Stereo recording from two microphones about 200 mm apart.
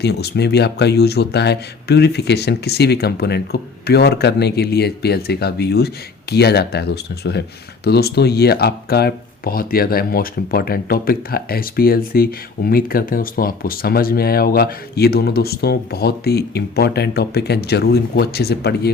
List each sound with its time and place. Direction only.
0.0 s speech: 55° left (ahead or behind)